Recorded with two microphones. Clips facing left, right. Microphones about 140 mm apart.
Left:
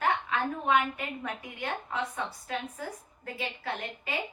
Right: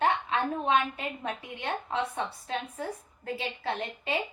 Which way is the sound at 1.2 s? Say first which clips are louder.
Right 3 dB; 25° right (ahead or behind).